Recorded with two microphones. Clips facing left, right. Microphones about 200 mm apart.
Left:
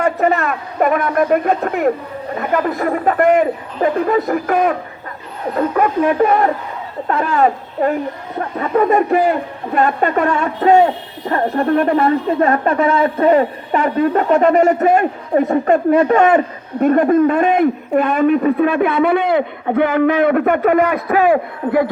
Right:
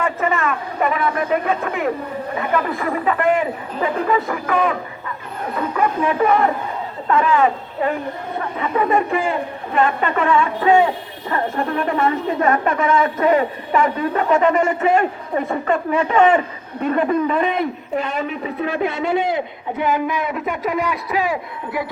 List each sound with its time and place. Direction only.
0.0 s a man's voice: 40° left (ahead or behind)